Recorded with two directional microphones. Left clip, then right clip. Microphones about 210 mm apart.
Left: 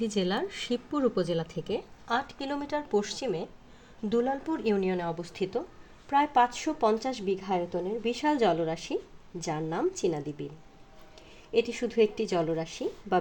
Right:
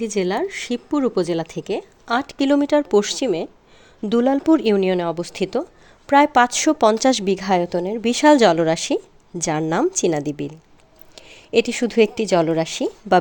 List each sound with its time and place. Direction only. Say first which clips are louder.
0.0 s a woman's voice: right 8 dB; 40° right (ahead or behind)